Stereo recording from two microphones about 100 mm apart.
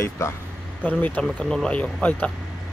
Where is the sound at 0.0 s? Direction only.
30° left (ahead or behind).